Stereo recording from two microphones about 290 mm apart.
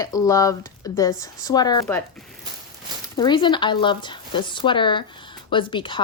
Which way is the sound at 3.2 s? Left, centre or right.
Centre.